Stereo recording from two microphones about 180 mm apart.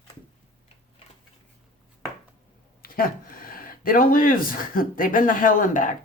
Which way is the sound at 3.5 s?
55° left (ahead or behind).